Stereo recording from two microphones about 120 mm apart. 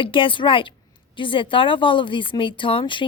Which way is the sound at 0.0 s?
45° left (ahead or behind).